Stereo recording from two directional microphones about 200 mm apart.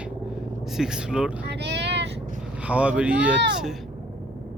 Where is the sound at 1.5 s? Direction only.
55° right (ahead or behind).